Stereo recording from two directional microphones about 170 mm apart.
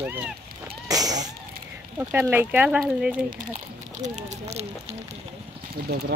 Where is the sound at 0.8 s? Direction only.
20° right (ahead or behind).